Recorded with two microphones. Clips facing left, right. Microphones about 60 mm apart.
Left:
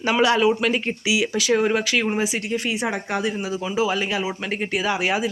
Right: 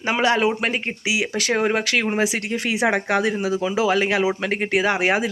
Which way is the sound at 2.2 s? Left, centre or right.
Right.